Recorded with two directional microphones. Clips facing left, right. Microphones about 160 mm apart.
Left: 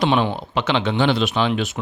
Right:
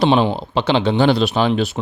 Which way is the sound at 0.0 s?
30° right (ahead or behind).